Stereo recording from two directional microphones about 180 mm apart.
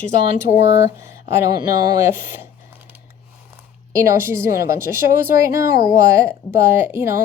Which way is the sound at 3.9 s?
15° right (ahead or behind).